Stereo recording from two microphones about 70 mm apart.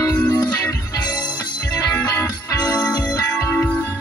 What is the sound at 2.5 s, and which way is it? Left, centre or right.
Music, left.